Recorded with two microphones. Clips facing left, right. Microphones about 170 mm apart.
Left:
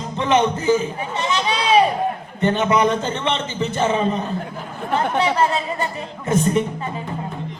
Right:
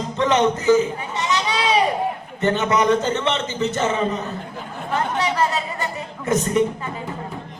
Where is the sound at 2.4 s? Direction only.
20° left (ahead or behind).